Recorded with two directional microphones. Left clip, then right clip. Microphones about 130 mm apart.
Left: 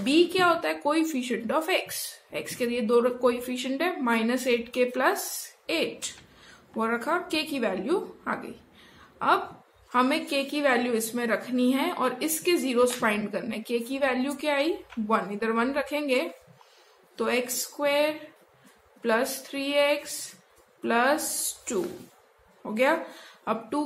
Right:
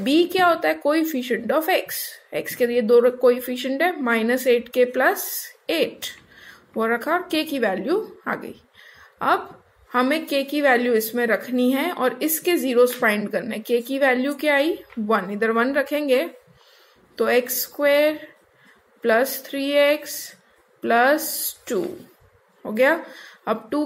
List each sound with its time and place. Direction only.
0.0 s a woman's voice: 35° right (ahead or behind)
22.6 s a woman's voice: 35° right (ahead or behind)